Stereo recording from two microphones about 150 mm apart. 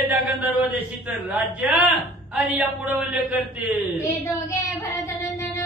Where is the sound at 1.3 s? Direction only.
10° right (ahead or behind).